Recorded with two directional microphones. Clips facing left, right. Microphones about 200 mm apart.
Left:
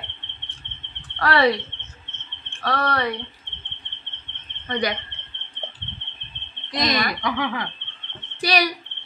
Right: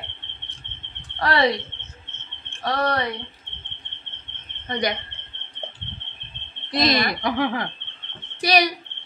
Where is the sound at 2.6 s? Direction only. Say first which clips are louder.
Even; 15° right (ahead or behind).